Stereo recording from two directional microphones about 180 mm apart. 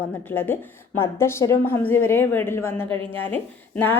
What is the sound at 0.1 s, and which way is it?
A woman's voice, 10° left (ahead or behind).